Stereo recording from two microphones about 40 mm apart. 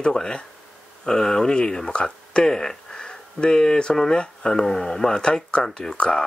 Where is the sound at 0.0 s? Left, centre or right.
Left.